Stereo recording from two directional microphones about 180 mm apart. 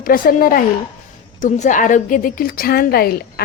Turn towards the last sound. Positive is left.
turn(degrees=55)  # may be behind; listen again after turning